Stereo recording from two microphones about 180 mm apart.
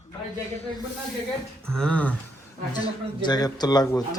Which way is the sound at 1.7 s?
5° left (ahead or behind).